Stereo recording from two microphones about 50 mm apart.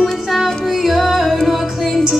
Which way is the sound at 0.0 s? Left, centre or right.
Centre.